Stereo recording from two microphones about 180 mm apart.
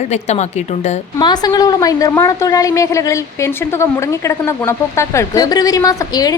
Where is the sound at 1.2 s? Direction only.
25° left (ahead or behind).